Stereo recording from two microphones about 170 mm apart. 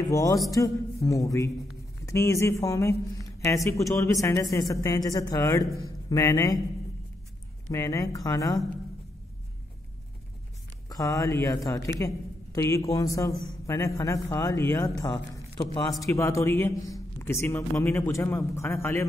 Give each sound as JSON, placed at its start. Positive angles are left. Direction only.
{"t": 0.1, "sound": "a man's voice", "side_deg": 20}
{"t": 7.7, "sound": "speech", "side_deg": 15}
{"t": 10.9, "sound": "a man's voice", "side_deg": 20}